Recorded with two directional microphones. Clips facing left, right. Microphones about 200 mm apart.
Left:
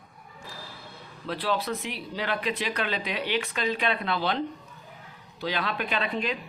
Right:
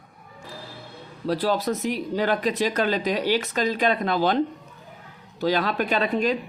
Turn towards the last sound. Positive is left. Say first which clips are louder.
# right 7 dB
turn(degrees=-45)  # may be behind; listen again after turning